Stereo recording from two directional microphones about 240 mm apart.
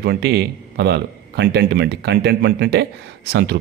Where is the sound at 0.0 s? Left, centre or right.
Right.